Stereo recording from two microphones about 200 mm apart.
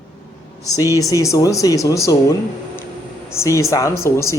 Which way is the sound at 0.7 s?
15° left (ahead or behind).